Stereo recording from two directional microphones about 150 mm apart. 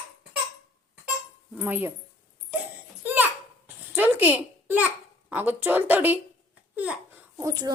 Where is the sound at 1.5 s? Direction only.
10° right (ahead or behind).